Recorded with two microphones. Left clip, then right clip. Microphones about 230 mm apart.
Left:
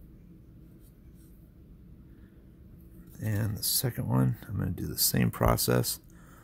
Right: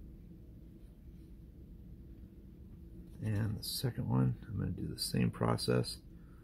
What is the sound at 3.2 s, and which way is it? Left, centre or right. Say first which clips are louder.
Speech: left 6 dB; left.